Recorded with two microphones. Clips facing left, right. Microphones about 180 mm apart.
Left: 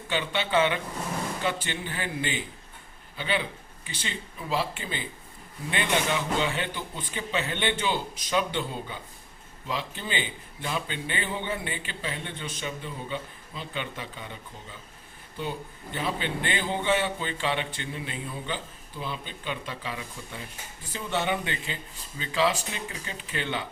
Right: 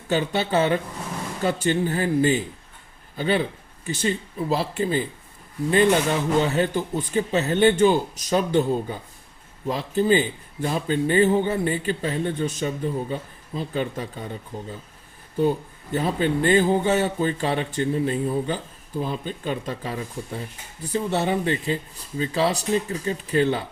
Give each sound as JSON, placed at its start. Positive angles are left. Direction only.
{"t": 0.1, "sound": "a man's voice", "side_deg": -40}